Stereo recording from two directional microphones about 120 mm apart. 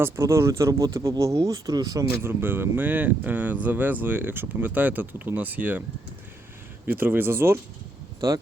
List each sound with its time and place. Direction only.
0.0 s speech: 20° right (ahead or behind)
2.0 s speech: 15° right (ahead or behind)
6.8 s speech: 15° right (ahead or behind)